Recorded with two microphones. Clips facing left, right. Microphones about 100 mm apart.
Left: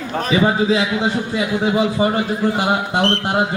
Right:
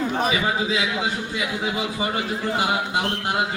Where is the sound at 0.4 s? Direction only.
40° left (ahead or behind).